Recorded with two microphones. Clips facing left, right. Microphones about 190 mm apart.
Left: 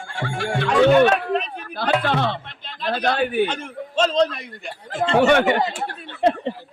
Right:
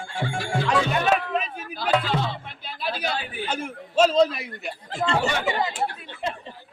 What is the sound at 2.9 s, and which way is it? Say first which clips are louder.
Speech: left 15 dB; 60° left (ahead or behind).